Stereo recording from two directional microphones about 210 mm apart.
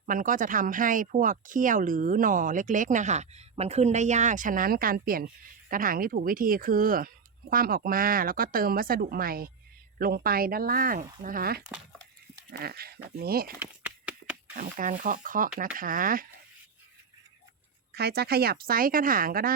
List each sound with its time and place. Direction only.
0.0 s a woman's voice: 40° right (ahead or behind)
13.6 s a sound: 5° right (ahead or behind)
14.5 s speech: 40° right (ahead or behind)
17.9 s a woman's voice: 50° right (ahead or behind)